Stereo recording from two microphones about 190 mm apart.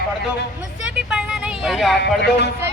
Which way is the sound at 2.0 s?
60° left (ahead or behind).